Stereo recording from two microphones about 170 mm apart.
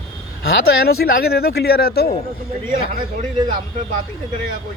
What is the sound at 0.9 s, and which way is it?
Speech, 65° left (ahead or behind).